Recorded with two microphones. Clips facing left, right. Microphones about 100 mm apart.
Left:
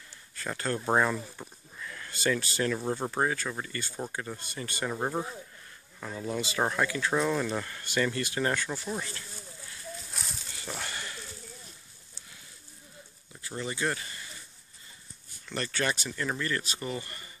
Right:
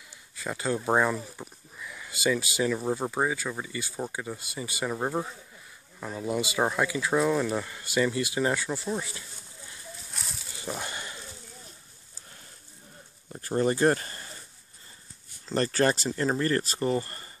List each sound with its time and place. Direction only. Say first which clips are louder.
0.4 s speech: right 3 dB; 10° right (ahead or behind)
5.9 s speech: right 3 dB; 15° right (ahead or behind)
10.1 s a sound: even; centre (ahead or behind)
10.5 s a sound: right 4 dB; 20° right (ahead or behind)
13.3 s speech: right 11 dB; 45° right (ahead or behind)
15.4 s speech: right 7 dB; 35° right (ahead or behind)